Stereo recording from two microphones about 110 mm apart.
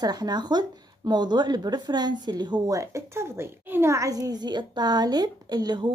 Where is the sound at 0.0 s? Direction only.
40° right (ahead or behind).